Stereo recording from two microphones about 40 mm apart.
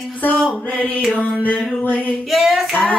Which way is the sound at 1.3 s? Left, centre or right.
Left.